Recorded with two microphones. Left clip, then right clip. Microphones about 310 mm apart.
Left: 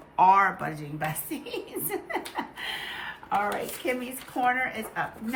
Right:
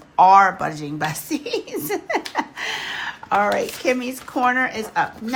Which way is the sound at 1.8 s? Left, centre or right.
Centre.